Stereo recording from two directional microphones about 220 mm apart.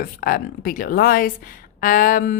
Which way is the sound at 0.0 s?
40° left (ahead or behind).